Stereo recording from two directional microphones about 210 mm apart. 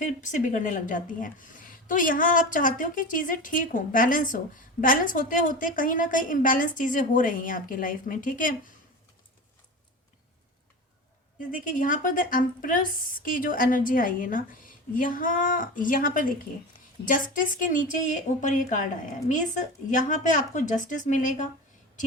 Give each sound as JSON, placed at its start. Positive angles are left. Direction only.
{"t": 0.0, "sound": "a woman's voice", "side_deg": 35}
{"t": 11.3, "sound": "a woman's voice", "side_deg": 40}